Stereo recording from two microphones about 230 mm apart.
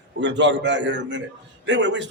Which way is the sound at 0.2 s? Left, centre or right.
Right.